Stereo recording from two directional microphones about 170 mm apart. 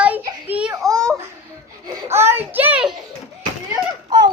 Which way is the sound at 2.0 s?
15° right (ahead or behind).